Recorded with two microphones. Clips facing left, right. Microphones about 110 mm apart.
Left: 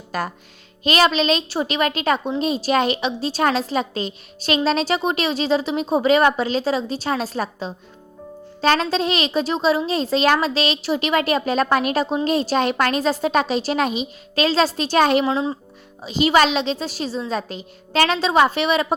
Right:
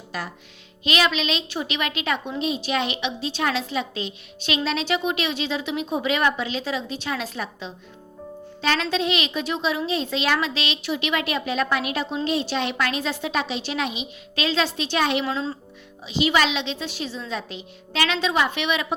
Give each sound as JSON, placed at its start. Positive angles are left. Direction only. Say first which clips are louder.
{"t": 0.1, "sound": "a woman's voice", "louder": "left 7 dB", "side_deg": 45}
{"t": 15.2, "sound": "speech", "louder": "left 6 dB", "side_deg": 20}
{"t": 16.0, "sound": "a woman's voice", "louder": "left 5 dB", "side_deg": 40}